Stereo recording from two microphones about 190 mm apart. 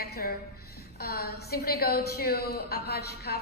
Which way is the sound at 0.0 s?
55° left (ahead or behind).